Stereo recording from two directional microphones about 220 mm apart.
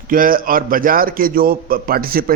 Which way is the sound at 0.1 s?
40° right (ahead or behind).